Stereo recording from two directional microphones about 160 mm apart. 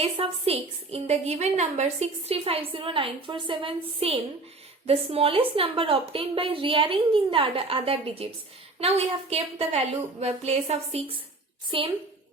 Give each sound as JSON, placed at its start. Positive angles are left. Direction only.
{"t": 0.0, "sound": "a woman's voice", "side_deg": -40}